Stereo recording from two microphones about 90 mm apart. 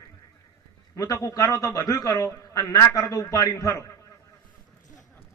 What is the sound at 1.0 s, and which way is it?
A man's voice, 35° left (ahead or behind).